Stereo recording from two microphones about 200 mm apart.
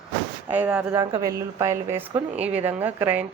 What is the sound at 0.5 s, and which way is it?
A woman's voice, 10° right (ahead or behind).